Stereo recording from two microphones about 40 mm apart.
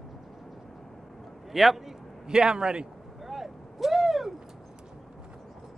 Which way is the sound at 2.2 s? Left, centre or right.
Centre.